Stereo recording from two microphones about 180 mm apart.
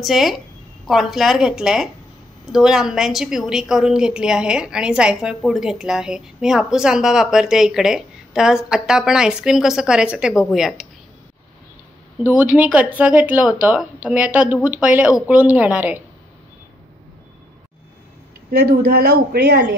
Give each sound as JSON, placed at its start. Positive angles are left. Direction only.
{"t": 0.0, "sound": "a woman's voice", "side_deg": 0}
{"t": 12.2, "sound": "speech", "side_deg": -10}
{"t": 18.5, "sound": "a man's voice", "side_deg": -60}